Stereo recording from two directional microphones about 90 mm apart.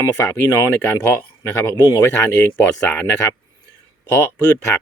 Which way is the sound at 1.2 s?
25° left (ahead or behind).